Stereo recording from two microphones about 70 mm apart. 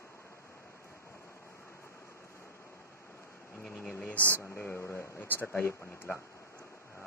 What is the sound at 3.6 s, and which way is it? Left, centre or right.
Speech, centre.